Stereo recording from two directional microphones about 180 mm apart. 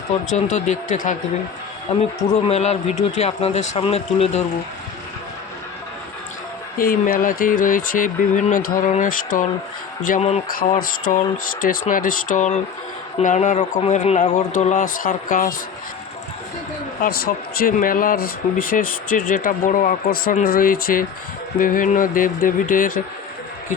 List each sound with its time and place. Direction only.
0.3 s a man's voice: 40° left (ahead or behind)
6.7 s speech: 50° left (ahead or behind)
10.1 s a man's voice: 35° left (ahead or behind)
10.5 s speech: 50° left (ahead or behind)
17.0 s speech: 55° left (ahead or behind)